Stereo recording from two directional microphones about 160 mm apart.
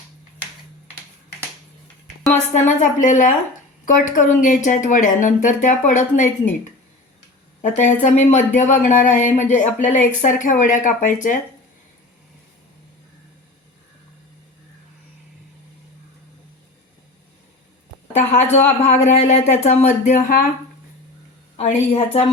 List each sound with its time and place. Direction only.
2.3 s speech: 50° left (ahead or behind)
7.6 s speech: 50° left (ahead or behind)
18.3 s speech: 45° left (ahead or behind)
21.5 s a woman's voice: 40° left (ahead or behind)